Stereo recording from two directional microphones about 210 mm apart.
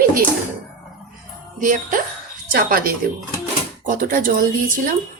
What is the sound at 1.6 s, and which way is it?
Speech, 40° right (ahead or behind).